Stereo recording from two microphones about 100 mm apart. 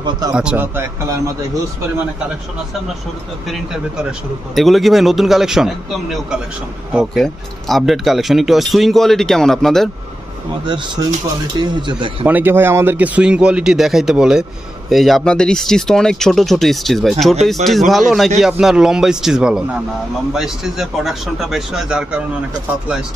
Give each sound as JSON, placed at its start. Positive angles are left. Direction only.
{"t": 0.3, "sound": "a man's voice", "side_deg": -10}
{"t": 3.4, "sound": "speech", "side_deg": -5}
{"t": 10.6, "sound": "speech", "side_deg": -50}
{"t": 12.3, "sound": "a man's voice", "side_deg": -20}